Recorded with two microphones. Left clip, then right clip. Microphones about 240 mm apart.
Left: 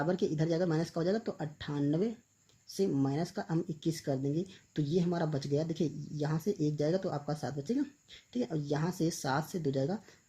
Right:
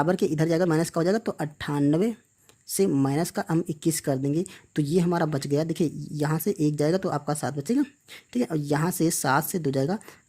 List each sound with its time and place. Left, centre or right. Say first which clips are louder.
0.0 s speech: right 8 dB; right